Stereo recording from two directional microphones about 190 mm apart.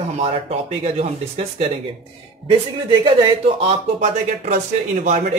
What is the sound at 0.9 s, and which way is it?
Speech, 35° right (ahead or behind).